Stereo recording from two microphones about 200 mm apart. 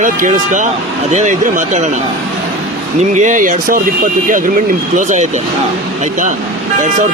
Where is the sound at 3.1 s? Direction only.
40° right (ahead or behind).